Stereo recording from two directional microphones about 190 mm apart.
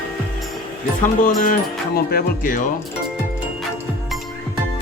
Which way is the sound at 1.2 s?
45° left (ahead or behind).